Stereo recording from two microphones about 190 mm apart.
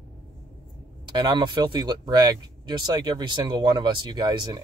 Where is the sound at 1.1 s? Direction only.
25° right (ahead or behind).